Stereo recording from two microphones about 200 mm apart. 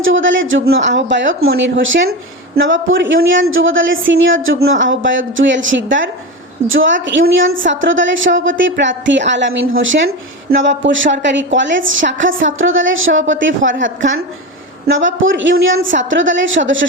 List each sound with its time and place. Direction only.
0.0 s a woman's voice: 70° right (ahead or behind)